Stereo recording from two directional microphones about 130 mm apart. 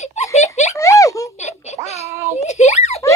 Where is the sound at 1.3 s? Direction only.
60° left (ahead or behind).